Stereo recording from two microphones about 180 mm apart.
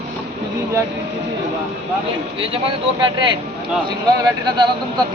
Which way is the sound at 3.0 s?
25° right (ahead or behind).